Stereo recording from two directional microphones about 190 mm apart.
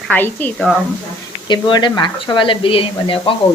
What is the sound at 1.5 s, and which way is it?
Speech, 25° left (ahead or behind).